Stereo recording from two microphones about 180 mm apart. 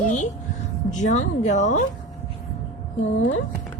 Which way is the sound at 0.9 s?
40° left (ahead or behind).